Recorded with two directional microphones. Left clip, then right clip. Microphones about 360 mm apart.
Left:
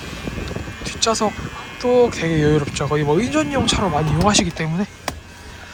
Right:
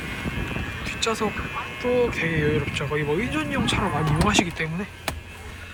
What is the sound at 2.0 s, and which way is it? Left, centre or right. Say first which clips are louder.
Speech: left 5 dB; centre.